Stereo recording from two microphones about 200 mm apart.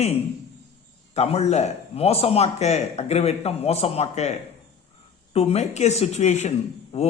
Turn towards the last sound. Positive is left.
turn(degrees=35)  # may be behind; listen again after turning